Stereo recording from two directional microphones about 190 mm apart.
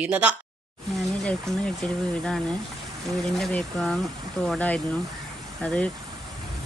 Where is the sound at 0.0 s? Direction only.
5° right (ahead or behind).